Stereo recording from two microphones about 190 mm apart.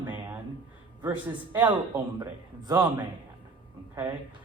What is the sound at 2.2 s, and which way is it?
Speech, 20° right (ahead or behind).